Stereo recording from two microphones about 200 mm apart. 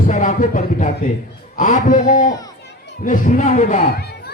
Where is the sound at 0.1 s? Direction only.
40° left (ahead or behind).